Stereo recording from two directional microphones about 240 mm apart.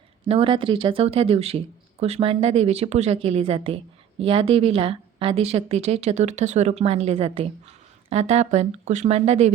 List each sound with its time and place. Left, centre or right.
0.3 s speech: right